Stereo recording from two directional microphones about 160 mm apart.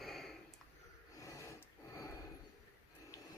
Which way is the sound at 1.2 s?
20° left (ahead or behind).